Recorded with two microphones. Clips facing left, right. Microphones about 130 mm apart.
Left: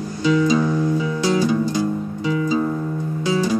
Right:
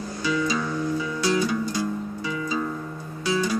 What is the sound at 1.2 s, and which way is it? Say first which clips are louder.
Music: left 3 dB; 25° left (ahead or behind).